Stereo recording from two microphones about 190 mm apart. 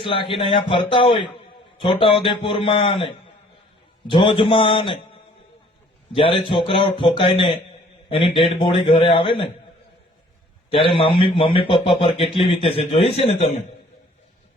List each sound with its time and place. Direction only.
0.0 s a man's voice: 25° left (ahead or behind)
4.1 s a man's voice: 30° left (ahead or behind)
10.7 s a man's voice: 30° left (ahead or behind)